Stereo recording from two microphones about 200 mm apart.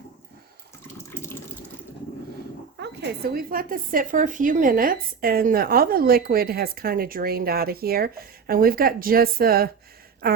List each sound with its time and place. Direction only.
0.9 s water: 10° left (ahead or behind)
2.7 s speech: 55° right (ahead or behind)